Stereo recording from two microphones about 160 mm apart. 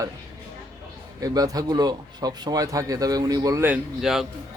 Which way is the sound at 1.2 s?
20° right (ahead or behind).